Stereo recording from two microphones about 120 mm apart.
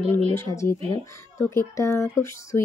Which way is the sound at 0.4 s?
25° left (ahead or behind).